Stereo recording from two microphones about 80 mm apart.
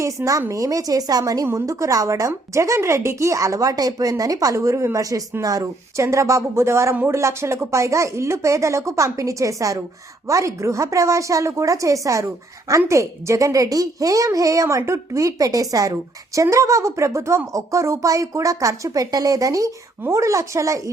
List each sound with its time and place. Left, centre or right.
0.0 s a woman's voice: right
1.5 s a woman's voice: right